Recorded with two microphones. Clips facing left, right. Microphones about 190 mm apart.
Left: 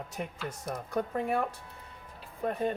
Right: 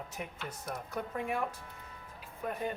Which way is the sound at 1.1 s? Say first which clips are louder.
Left 4 dB; 35° left (ahead or behind).